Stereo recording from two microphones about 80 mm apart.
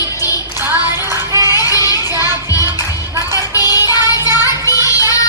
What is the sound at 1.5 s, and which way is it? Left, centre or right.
Child singing, left.